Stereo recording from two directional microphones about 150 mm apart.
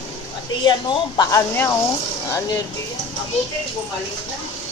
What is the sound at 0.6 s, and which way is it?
A woman's voice, 30° left (ahead or behind).